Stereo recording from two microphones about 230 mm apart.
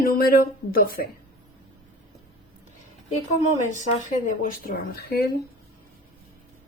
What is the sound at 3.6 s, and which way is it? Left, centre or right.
A woman's voice, left.